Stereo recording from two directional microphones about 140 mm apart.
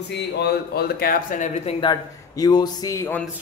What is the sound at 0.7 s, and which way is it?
Speech, 90° left.